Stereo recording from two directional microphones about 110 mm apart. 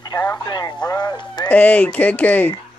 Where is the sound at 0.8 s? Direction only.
40° left (ahead or behind).